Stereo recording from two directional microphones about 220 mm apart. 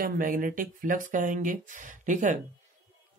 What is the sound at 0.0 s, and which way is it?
Speech, 40° right (ahead or behind).